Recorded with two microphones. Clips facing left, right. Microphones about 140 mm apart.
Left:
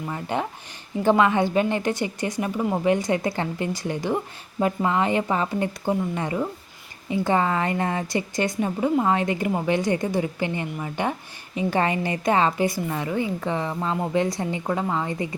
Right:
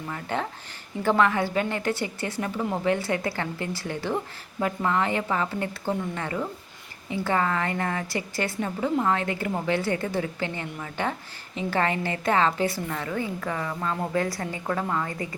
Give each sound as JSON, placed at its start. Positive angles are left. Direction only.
{"t": 0.1, "sound": "a woman's voice", "side_deg": 15}